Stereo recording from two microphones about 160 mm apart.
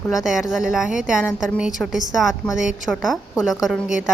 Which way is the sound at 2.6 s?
50° left (ahead or behind).